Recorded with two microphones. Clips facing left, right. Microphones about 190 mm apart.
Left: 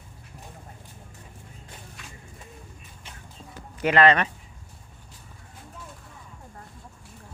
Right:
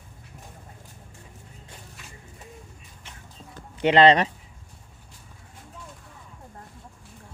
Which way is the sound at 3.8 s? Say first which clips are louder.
Right 3 dB; 25° right (ahead or behind).